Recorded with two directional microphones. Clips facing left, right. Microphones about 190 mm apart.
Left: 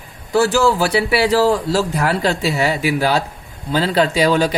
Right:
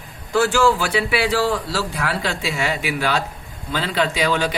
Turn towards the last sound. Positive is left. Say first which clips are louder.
# left 5 dB
turn(degrees=35)  # may be behind; listen again after turning